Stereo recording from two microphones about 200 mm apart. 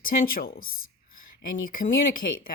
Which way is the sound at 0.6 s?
90° left.